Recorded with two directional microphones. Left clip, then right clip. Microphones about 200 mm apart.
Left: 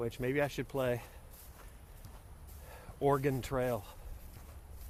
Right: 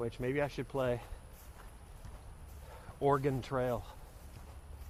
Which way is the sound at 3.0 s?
15° left (ahead or behind).